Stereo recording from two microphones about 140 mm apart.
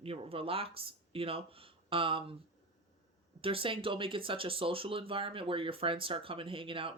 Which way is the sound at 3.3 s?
40° right (ahead or behind).